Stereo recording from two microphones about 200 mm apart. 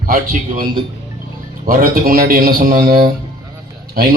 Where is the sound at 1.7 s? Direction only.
45° right (ahead or behind).